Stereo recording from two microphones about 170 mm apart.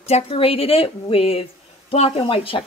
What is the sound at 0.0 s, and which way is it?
Speech, 35° left (ahead or behind).